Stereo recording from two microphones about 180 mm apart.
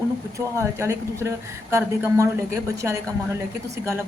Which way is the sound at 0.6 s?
15° right (ahead or behind).